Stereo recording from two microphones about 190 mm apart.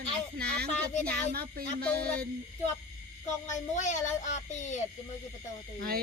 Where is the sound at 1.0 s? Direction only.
55° right (ahead or behind).